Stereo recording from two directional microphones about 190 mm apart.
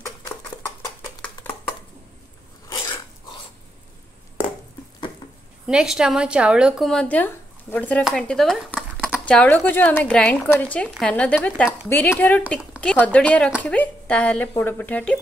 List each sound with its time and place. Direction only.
2.7 s dog: 20° left (ahead or behind)
5.7 s a woman's voice: 5° right (ahead or behind)